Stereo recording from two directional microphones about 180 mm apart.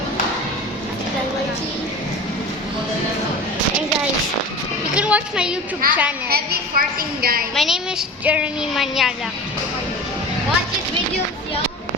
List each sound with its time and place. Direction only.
4.9 s a sound: 5° right (ahead or behind)
5.8 s a woman's voice: 55° right (ahead or behind)
7.5 s speech: centre (ahead or behind)